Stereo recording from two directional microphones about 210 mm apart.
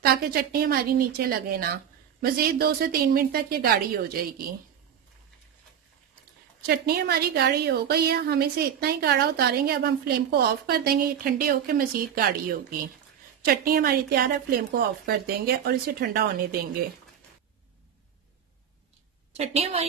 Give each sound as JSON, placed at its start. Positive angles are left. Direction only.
{"t": 0.0, "sound": "a woman's voice", "side_deg": -45}
{"t": 6.6, "sound": "a woman's voice", "side_deg": -45}
{"t": 19.3, "sound": "a woman's voice", "side_deg": -30}